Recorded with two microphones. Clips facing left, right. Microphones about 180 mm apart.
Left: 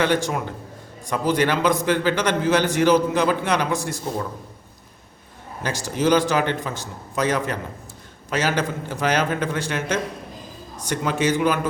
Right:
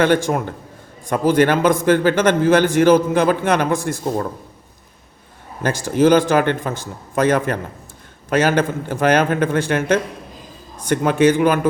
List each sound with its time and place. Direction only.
0.0 s a man's voice: 50° right (ahead or behind)
5.6 s a man's voice: 55° right (ahead or behind)